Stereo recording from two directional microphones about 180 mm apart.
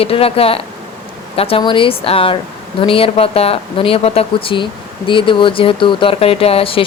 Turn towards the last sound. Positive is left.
turn(degrees=30)  # may be behind; listen again after turning